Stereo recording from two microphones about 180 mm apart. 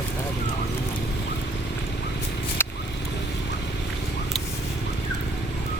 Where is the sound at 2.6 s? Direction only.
10° left (ahead or behind).